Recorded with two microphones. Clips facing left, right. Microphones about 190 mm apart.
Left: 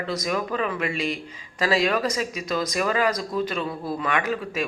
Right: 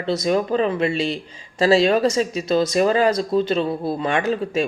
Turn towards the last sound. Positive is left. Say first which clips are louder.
# right 5 dB
turn(degrees=-30)  # may be behind; listen again after turning